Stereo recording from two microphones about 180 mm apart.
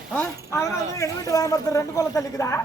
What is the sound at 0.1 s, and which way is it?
Speech, 10° left (ahead or behind).